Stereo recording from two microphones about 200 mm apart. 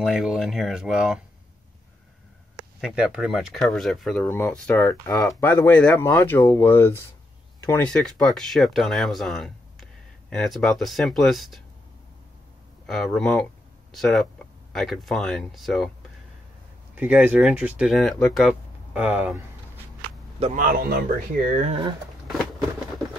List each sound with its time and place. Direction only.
0.0 s speech: centre (ahead or behind)
2.8 s speech: 5° right (ahead or behind)
12.8 s speech: 5° left (ahead or behind)
16.9 s speech: 10° right (ahead or behind)
20.3 s speech: 30° right (ahead or behind)
20.6 s speech: 50° right (ahead or behind)